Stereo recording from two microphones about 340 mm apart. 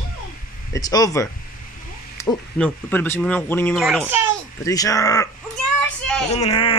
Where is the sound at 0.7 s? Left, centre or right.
Centre.